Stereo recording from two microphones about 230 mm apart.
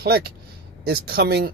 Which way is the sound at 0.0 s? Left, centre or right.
Right.